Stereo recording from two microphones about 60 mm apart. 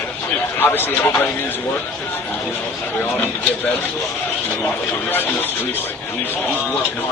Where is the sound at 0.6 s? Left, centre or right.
Left.